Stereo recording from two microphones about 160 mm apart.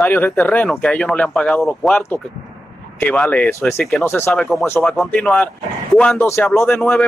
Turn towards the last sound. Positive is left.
turn(degrees=5)  # may be behind; listen again after turning